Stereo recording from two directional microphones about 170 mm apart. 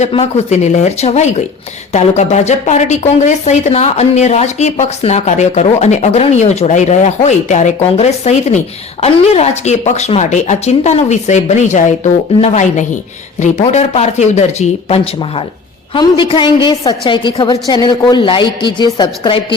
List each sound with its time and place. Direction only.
0.0 s a woman's voice: 35° left (ahead or behind)